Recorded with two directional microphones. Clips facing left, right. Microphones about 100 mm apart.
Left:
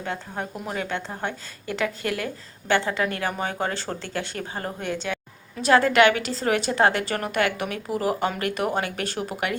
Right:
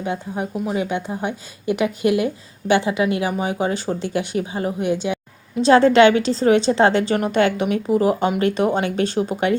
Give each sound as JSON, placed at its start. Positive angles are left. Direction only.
{"t": 0.0, "sound": "a woman's voice", "side_deg": -15}